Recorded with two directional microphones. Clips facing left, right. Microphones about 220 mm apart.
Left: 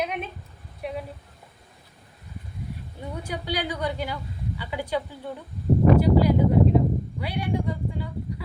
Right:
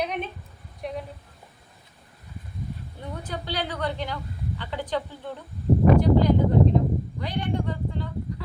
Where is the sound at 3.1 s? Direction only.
10° left (ahead or behind).